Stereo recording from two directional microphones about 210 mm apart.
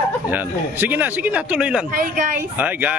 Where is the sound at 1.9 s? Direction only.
40° right (ahead or behind).